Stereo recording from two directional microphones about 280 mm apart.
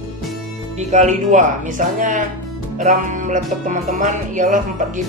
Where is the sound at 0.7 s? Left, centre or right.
Right.